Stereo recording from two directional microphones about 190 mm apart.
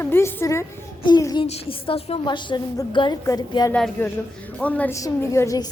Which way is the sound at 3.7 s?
10° left (ahead or behind).